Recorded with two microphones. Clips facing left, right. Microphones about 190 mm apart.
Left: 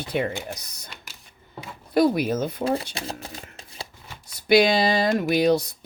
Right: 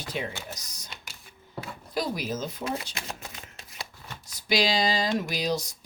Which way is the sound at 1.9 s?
60° left (ahead or behind).